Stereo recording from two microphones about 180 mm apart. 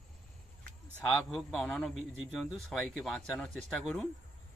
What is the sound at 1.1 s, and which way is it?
Speech, 5° left (ahead or behind).